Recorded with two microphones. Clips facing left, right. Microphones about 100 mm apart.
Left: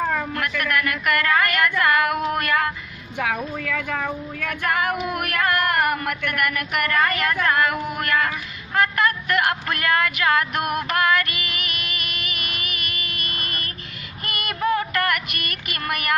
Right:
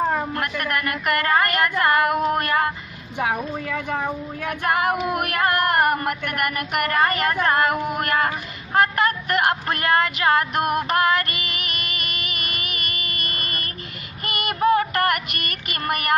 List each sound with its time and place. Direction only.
0.0 s speech: 30° right (ahead or behind)
14.2 s female singing: 45° right (ahead or behind)
15.0 s child singing: 40° right (ahead or behind)